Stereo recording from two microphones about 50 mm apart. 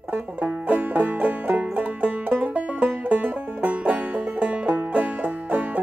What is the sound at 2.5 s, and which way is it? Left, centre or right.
Music, right.